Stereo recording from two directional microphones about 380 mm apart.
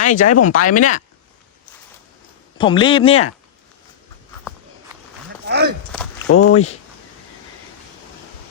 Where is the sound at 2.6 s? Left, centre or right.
Centre.